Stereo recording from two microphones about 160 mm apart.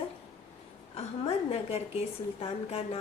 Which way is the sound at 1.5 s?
40° left (ahead or behind).